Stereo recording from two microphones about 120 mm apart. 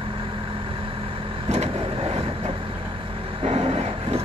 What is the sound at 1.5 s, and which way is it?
Vehicle, 55° right (ahead or behind).